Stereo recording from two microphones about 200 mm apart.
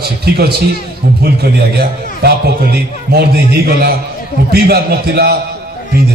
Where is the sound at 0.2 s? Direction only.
50° right (ahead or behind).